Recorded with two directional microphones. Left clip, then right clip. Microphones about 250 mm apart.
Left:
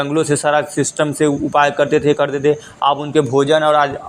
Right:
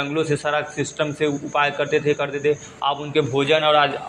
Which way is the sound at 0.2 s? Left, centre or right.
Left.